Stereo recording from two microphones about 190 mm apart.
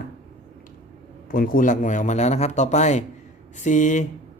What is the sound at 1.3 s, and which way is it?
Speech, 50° left (ahead or behind).